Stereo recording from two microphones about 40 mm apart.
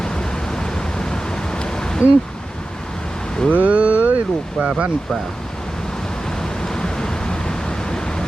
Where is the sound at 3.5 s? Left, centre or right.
Right.